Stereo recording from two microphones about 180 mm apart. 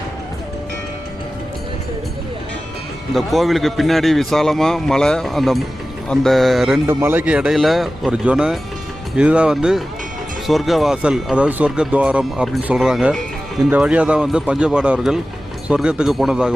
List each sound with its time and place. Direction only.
3.2 s speech: centre (ahead or behind)
6.8 s speech: 10° right (ahead or behind)